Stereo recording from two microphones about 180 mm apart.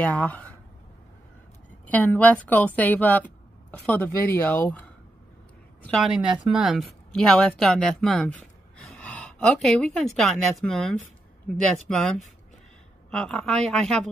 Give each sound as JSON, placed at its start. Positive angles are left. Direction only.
{"t": 0.0, "sound": "speech", "side_deg": 10}
{"t": 1.9, "sound": "a woman's voice", "side_deg": 10}
{"t": 5.9, "sound": "speech", "side_deg": 0}